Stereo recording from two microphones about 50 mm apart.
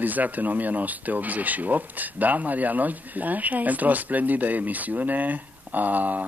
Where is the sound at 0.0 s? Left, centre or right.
Right.